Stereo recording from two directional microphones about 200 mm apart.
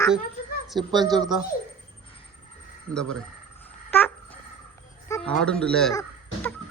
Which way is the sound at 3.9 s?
10° left (ahead or behind).